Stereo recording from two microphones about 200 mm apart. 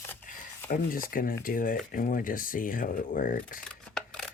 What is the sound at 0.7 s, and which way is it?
Speech, 45° left (ahead or behind).